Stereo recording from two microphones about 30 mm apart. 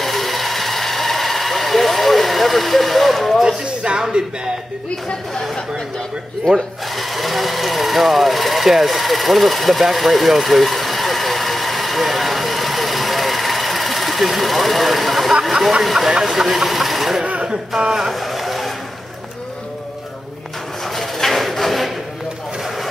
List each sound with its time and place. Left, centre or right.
0.0 s vehicle: centre
3.4 s speech: right
7.0 s speech: centre
9.9 s vehicle: centre
15.8 s speech: centre
17.5 s speech: right
18.1 s boat: centre
20.8 s bird: centre
21.5 s a sound: centre